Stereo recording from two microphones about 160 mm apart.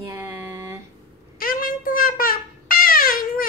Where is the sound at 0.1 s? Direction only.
15° right (ahead or behind).